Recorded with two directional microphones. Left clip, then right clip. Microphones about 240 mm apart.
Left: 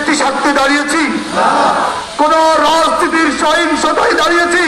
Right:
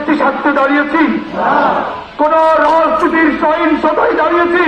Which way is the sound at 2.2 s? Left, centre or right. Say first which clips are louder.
Even; left.